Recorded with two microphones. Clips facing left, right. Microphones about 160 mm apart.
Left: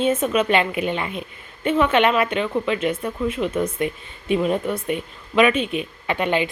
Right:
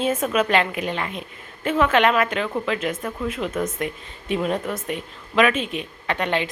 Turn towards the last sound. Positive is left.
turn(degrees=5)  # may be behind; listen again after turning